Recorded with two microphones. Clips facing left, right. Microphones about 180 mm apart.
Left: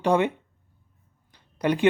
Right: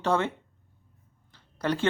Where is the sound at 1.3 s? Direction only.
15° left (ahead or behind).